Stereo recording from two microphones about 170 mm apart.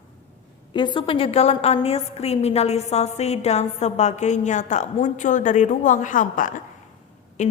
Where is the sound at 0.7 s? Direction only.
25° left (ahead or behind).